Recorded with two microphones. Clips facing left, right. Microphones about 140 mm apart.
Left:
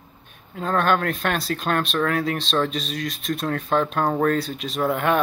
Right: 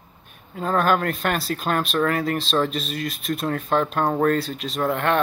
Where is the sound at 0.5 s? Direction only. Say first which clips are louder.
Right 1 dB; 5° right (ahead or behind).